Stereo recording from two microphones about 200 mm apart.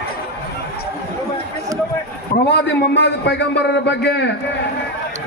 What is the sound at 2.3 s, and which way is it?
A man's voice, 55° left (ahead or behind).